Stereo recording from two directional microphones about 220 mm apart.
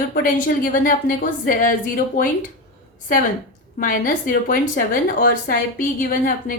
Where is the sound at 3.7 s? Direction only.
40° left (ahead or behind).